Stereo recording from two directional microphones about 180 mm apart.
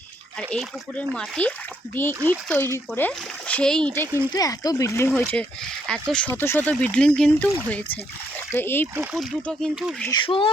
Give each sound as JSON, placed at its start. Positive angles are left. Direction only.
{"t": 0.3, "sound": "speech", "side_deg": 5}
{"t": 5.1, "sound": "speech", "side_deg": 5}
{"t": 9.0, "sound": "speech", "side_deg": 0}
{"t": 10.1, "sound": "speech", "side_deg": 30}